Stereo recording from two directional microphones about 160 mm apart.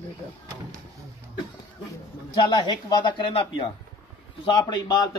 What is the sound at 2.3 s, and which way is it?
Speech, 30° left (ahead or behind).